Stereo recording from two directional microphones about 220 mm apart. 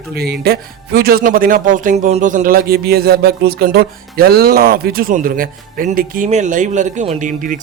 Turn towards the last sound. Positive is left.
turn(degrees=-35)  # may be behind; listen again after turning